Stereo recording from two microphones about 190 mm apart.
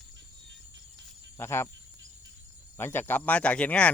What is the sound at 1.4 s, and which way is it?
Speech, 15° left (ahead or behind).